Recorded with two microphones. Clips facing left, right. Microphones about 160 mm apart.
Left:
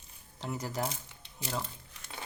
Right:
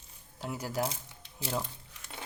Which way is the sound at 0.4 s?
5° right (ahead or behind).